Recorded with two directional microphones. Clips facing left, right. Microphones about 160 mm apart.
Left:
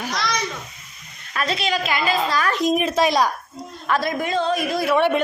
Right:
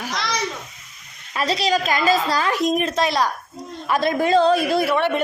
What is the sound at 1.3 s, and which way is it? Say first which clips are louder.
A woman's voice: right 3 dB; 30° right (ahead or behind).